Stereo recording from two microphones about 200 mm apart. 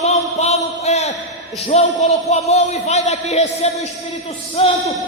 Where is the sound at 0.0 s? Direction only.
30° left (ahead or behind).